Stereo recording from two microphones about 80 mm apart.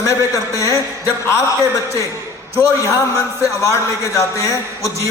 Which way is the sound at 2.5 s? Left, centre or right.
Left.